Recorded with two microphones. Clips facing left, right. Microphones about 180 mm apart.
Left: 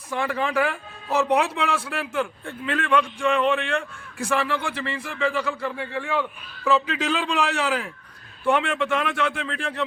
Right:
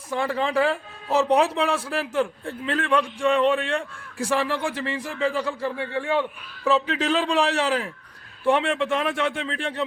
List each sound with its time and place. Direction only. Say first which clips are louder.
0.1 s speech: right 1 dB; 30° right (ahead or behind)